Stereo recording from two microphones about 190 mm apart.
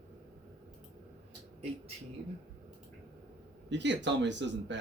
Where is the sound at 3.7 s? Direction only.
70° right (ahead or behind).